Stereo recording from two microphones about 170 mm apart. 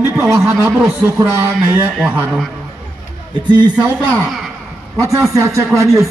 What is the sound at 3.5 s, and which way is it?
Speech, 25° right (ahead or behind).